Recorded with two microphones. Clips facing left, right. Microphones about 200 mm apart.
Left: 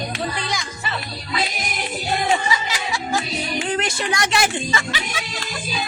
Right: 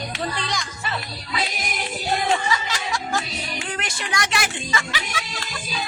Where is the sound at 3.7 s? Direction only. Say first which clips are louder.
Left 7 dB; 25° left (ahead or behind).